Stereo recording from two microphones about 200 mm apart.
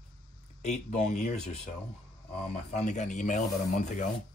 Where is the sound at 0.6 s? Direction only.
35° left (ahead or behind).